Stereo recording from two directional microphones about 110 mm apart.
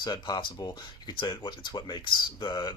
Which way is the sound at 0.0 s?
45° left (ahead or behind).